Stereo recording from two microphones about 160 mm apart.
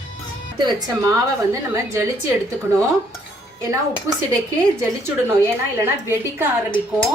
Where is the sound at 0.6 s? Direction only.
25° right (ahead or behind).